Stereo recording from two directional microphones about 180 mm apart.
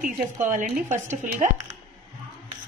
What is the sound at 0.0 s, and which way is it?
A woman's voice, 45° right (ahead or behind).